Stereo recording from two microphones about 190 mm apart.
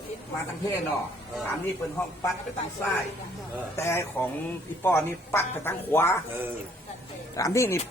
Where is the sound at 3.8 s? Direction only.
15° left (ahead or behind).